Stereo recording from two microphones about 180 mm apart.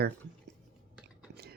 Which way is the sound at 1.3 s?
60° right (ahead or behind).